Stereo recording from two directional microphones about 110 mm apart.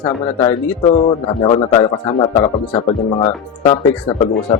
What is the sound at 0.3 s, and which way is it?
Speech, 35° left (ahead or behind).